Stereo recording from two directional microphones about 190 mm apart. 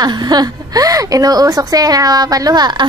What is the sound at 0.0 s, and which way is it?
A woman's voice, 20° right (ahead or behind).